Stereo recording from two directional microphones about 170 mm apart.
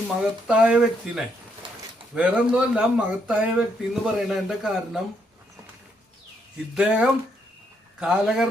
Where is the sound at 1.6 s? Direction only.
30° right (ahead or behind).